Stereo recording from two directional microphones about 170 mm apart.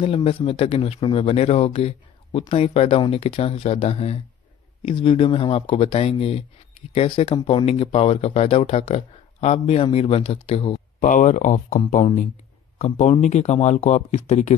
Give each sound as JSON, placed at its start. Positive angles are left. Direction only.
{"t": 0.0, "sound": "speech", "side_deg": 35}
{"t": 11.1, "sound": "speech", "side_deg": 50}